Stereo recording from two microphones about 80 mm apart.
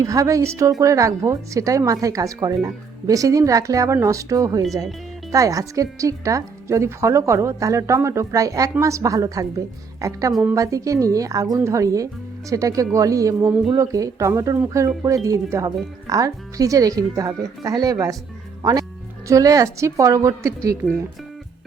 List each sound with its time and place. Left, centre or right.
0.0 s a woman's voice: right